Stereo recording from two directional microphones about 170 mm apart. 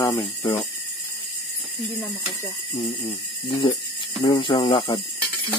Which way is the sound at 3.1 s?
30° left (ahead or behind).